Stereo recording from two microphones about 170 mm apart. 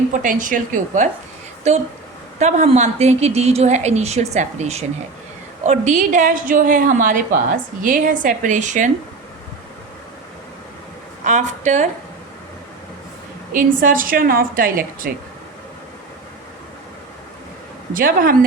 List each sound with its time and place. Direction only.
0.1 s a woman's voice: 50° right (ahead or behind)
11.3 s a woman's voice: 45° right (ahead or behind)
13.5 s a woman's voice: 55° right (ahead or behind)
17.9 s a woman's voice: 55° right (ahead or behind)